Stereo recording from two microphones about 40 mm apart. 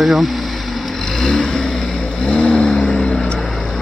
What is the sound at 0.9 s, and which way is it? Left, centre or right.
Vehicle, centre.